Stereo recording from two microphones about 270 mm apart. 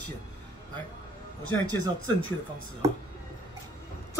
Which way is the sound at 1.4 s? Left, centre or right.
Left.